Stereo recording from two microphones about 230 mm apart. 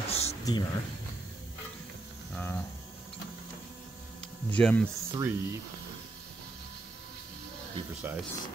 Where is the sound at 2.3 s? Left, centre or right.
Centre.